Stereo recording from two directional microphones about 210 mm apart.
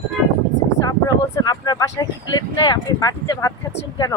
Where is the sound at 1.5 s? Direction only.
20° left (ahead or behind).